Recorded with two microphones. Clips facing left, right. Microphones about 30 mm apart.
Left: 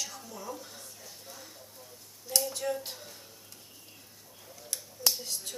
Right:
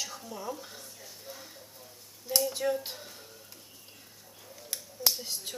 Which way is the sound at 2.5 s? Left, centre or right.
Centre.